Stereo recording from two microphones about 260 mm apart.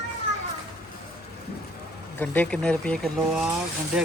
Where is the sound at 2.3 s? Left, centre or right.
Centre.